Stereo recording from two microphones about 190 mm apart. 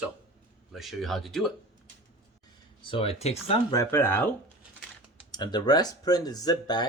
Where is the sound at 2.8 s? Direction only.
30° left (ahead or behind).